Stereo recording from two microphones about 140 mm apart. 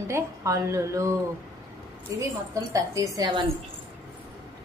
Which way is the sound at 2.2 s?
25° right (ahead or behind).